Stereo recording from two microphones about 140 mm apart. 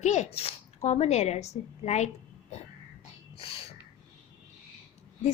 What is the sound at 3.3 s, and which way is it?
Snort, 40° left (ahead or behind).